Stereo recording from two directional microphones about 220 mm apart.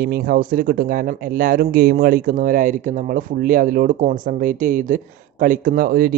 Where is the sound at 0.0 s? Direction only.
45° right (ahead or behind).